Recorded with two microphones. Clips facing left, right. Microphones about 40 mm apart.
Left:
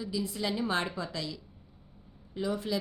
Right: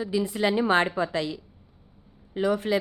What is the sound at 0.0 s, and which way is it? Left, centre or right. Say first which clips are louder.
A woman's voice: right 8 dB; right.